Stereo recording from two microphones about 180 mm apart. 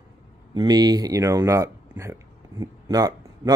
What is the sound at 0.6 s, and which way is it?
Speech, 20° right (ahead or behind).